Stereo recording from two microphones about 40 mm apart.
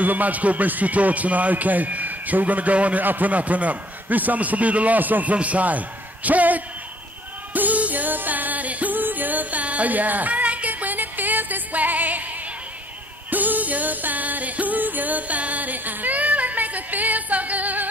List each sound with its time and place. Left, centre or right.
0.0 s speech: right
5.3 s a man's voice: right
7.5 s music: right